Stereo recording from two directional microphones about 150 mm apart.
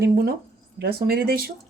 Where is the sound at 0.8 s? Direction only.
90° right.